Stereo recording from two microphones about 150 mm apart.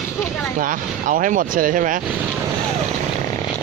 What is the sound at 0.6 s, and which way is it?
Speech, 65° right (ahead or behind).